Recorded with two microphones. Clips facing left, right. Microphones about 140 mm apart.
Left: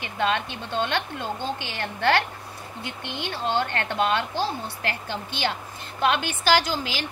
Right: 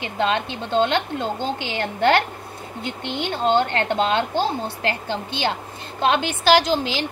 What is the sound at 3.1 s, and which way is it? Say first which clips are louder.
A woman's voice: right 7 dB; 20° right (ahead or behind).